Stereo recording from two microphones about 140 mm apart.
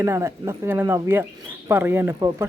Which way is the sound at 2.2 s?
30° right (ahead or behind).